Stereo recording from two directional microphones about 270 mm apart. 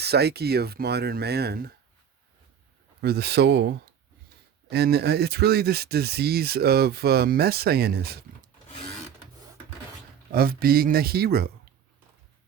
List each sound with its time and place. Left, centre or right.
0.0 s speech: right
3.0 s speech: right
10.3 s speech: right